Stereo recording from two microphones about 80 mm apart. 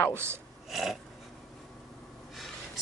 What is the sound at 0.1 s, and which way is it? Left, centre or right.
Speech, right.